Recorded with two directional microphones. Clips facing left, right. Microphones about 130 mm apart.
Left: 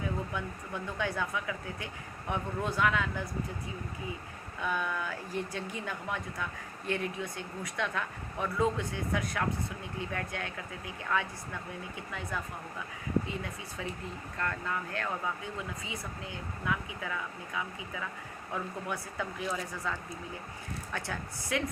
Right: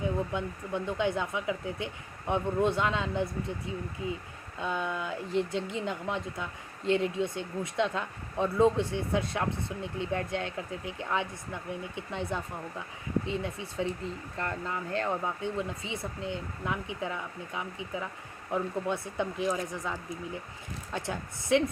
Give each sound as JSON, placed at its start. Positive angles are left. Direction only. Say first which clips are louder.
{"t": 0.0, "sound": "speech", "louder": "right 4 dB", "side_deg": -20}
{"t": 4.6, "sound": "speech", "louder": "right 1 dB", "side_deg": -25}